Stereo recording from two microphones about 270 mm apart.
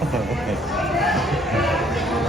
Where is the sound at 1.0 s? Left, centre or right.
Centre.